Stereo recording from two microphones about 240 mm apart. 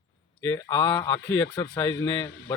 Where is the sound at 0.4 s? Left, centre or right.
Centre.